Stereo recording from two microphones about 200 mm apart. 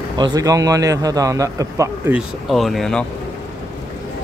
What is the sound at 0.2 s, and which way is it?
A man's voice, 20° right (ahead or behind).